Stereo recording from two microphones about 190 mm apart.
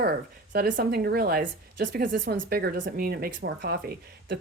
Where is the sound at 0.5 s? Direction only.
55° right (ahead or behind).